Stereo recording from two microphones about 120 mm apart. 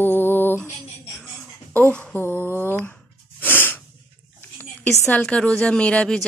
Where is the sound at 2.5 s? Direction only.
20° left (ahead or behind).